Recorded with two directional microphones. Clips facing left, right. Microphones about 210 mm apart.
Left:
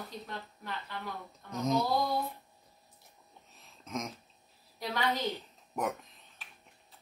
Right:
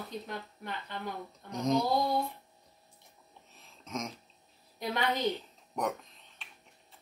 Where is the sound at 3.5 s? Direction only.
Centre (ahead or behind).